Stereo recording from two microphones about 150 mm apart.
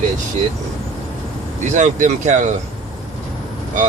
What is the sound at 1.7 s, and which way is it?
Speech, 55° right (ahead or behind).